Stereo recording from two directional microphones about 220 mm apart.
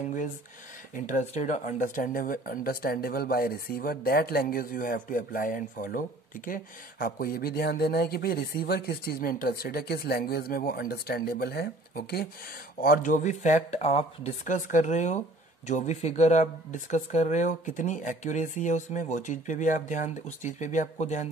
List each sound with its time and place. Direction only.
0.9 s speech: 35° left (ahead or behind)